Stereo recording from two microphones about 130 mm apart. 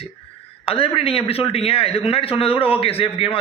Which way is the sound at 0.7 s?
45° left (ahead or behind).